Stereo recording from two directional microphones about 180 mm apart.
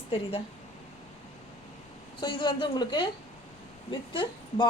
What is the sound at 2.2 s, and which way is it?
Speech, 25° left (ahead or behind).